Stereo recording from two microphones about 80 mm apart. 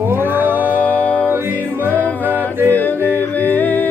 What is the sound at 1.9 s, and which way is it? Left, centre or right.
Music, centre.